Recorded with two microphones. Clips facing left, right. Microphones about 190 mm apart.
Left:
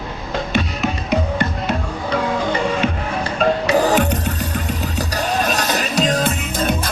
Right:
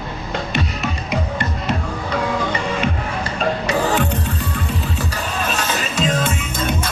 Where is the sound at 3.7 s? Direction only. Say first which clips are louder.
Left 3 dB; 40° left (ahead or behind).